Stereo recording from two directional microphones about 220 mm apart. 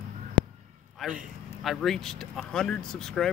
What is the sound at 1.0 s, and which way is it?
Speech, centre (ahead or behind).